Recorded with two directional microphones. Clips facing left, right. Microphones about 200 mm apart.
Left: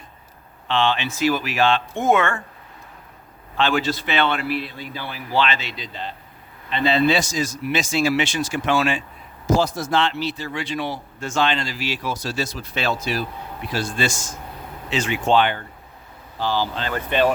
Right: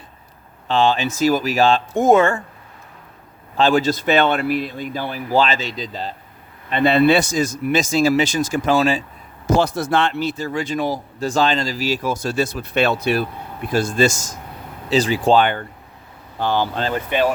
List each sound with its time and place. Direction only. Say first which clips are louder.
0.7 s speech: right 4 dB; 40° right (ahead or behind)
3.6 s speech: right 5 dB; 40° right (ahead or behind)
6.7 s speech: right 4 dB; 55° right (ahead or behind); by 9.0 s 35° right (ahead or behind)
9.5 s speech: right 2 dB; 65° right (ahead or behind)
13.7 s speech: right 7 dB; 45° right (ahead or behind)
16.4 s speech: right 3 dB; 55° right (ahead or behind)
16.9 s speech: left 1 dB; 10° right (ahead or behind)